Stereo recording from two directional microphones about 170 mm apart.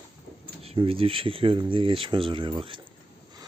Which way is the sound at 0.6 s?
35° right (ahead or behind).